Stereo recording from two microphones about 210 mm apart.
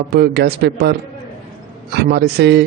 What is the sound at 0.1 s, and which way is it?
A man's voice, 50° right (ahead or behind).